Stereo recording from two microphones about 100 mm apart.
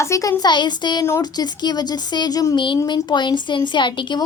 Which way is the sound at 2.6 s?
50° left (ahead or behind).